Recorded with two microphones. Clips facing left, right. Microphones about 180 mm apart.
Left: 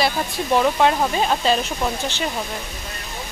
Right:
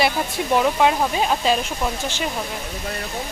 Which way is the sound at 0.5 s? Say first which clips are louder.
Left 1 dB; 5° right (ahead or behind).